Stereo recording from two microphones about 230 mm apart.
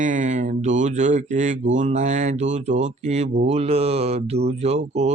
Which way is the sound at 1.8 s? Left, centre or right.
Right.